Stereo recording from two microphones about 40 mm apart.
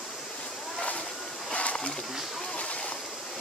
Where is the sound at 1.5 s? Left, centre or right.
Left.